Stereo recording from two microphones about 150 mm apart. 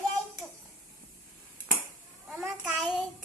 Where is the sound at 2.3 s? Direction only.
5° right (ahead or behind).